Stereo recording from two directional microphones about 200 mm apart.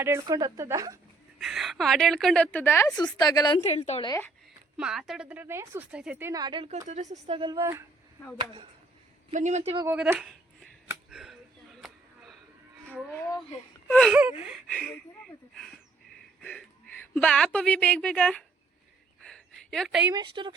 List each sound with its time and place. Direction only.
0.0 s a woman's voice: 15° right (ahead or behind)
1.4 s a woman's voice: centre (ahead or behind); by 3.6 s 20° left (ahead or behind)
3.7 s a woman's voice: 30° left (ahead or behind)
4.8 s a woman's voice: centre (ahead or behind); by 6.8 s 25° right (ahead or behind)
6.8 s a woman's voice: 35° right (ahead or behind); by 7.9 s 15° right (ahead or behind)
9.3 s speech: 35° right (ahead or behind)
9.8 s speech: 10° right (ahead or behind)
11.1 s a sound: centre (ahead or behind)
13.1 s speech: 10° left (ahead or behind)
13.8 s gasp: 5° left (ahead or behind)
14.1 s a woman's voice: 10° right (ahead or behind)
14.7 s a woman's voice: 5° left (ahead or behind)
19.2 s a sound: centre (ahead or behind)
20.1 s a woman's voice: 20° right (ahead or behind)